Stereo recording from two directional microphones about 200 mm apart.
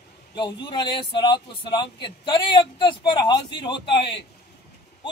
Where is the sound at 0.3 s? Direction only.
20° left (ahead or behind).